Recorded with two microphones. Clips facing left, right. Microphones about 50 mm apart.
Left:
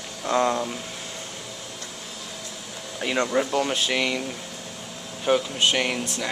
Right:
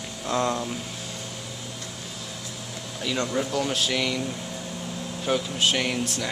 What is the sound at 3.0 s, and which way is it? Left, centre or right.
Speech, left.